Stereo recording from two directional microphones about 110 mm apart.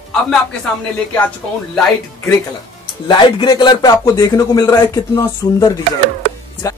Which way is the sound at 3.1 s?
45° left (ahead or behind).